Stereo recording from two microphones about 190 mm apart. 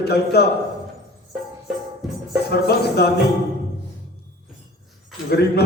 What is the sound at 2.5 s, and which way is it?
Speech, 55° left (ahead or behind).